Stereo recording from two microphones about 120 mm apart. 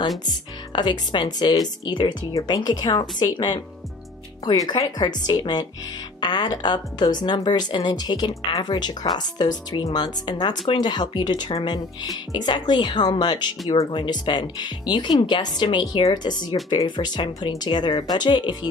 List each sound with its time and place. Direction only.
0.2 s speech: 35° left (ahead or behind)